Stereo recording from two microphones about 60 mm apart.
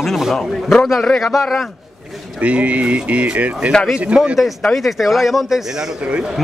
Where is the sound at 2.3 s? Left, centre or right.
Right.